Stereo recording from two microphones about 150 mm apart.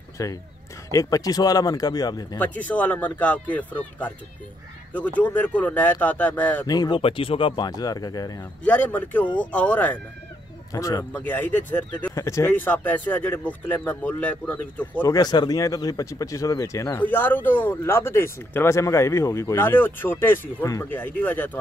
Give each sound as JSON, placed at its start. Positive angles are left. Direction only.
{"t": 0.2, "sound": "speech", "side_deg": 20}
{"t": 2.3, "sound": "speech", "side_deg": 10}
{"t": 6.7, "sound": "speech", "side_deg": 25}
{"t": 7.0, "sound": "speech", "side_deg": 35}
{"t": 8.6, "sound": "speech", "side_deg": 10}
{"t": 10.7, "sound": "speech", "side_deg": 25}
{"t": 11.2, "sound": "speech", "side_deg": 10}
{"t": 15.0, "sound": "speech", "side_deg": 25}